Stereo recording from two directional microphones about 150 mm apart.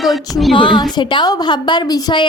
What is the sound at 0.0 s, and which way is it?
Female singing, centre (ahead or behind).